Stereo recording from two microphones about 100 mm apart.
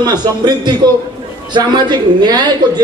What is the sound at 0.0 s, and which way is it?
A man's voice, 45° right (ahead or behind).